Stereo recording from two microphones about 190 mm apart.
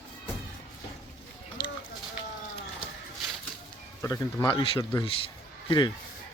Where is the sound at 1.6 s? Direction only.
20° left (ahead or behind).